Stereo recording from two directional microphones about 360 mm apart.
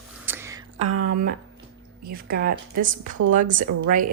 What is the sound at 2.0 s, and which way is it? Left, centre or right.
A woman's voice, right.